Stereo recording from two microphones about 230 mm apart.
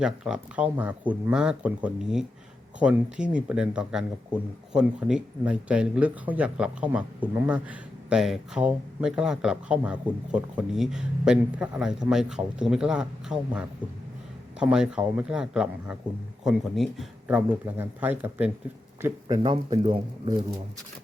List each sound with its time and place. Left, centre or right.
0.0 s speech: centre; by 20.3 s right